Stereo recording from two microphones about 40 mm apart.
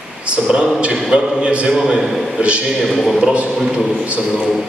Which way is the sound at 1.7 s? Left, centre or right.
Centre.